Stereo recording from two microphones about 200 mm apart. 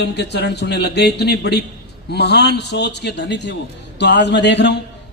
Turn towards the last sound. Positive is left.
turn(degrees=60)  # may be behind; listen again after turning